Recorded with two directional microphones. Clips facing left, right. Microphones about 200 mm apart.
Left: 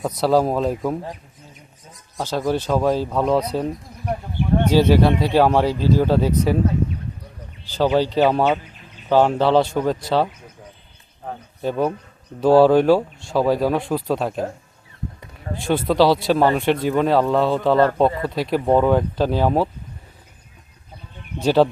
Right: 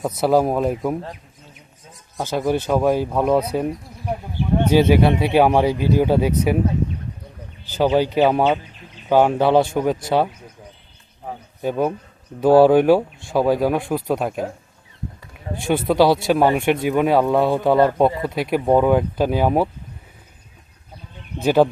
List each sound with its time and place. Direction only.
0.3 s speech: 15° right (ahead or behind)
2.1 s speech: 15° right (ahead or behind)
7.8 s speech: 15° right (ahead or behind)
11.6 s speech: 10° right (ahead or behind)
13.4 s speech: centre (ahead or behind)
15.6 s speech: 10° right (ahead or behind)
21.4 s speech: 10° right (ahead or behind)